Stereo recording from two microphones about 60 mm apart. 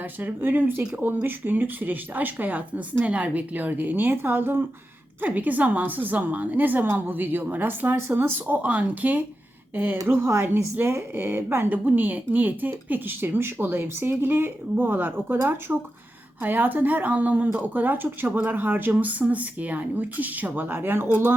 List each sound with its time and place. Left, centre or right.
0.0 s speech: right
15.7 s speech: right